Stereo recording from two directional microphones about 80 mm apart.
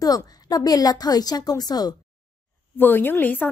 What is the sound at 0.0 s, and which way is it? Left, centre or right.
A woman's voice, left.